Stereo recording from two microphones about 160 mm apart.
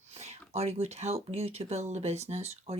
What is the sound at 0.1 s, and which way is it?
Speech, 40° right (ahead or behind).